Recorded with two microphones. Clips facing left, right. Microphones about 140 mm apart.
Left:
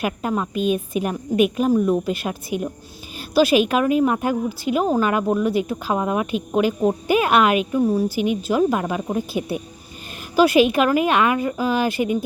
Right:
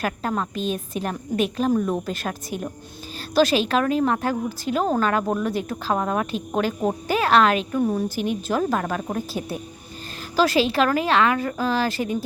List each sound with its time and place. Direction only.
0.0 s a woman's voice: 10° left (ahead or behind)